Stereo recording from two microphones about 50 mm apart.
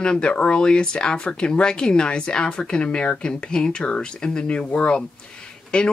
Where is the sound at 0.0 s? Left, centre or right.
Centre.